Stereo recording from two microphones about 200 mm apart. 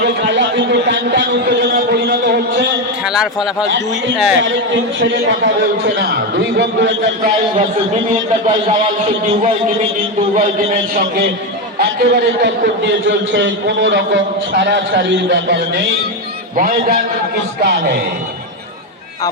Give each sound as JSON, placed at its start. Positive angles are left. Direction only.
{"t": 0.0, "sound": "a sound", "side_deg": -60}
{"t": 3.0, "sound": "a sound", "side_deg": -5}
{"t": 3.7, "sound": "a man's voice", "side_deg": -65}
{"t": 6.6, "sound": "a man's voice", "side_deg": -65}
{"t": 8.1, "sound": "a man's voice", "side_deg": -40}
{"t": 10.3, "sound": "a man's voice", "side_deg": -45}
{"t": 16.6, "sound": "a man's voice", "side_deg": -45}